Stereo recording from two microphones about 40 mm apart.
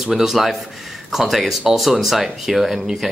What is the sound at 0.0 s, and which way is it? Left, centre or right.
A man's voice, centre.